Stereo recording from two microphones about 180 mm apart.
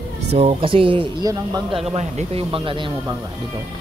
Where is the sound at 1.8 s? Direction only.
35° right (ahead or behind).